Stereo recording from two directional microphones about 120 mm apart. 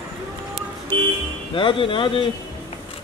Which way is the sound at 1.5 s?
45° left (ahead or behind).